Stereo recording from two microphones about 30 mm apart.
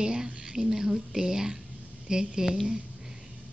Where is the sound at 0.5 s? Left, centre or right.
Centre.